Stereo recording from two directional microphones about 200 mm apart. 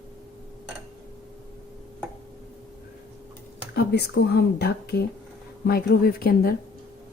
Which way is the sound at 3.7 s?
55° left (ahead or behind).